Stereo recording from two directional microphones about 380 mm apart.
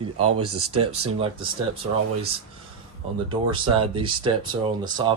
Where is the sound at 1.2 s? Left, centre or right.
Centre.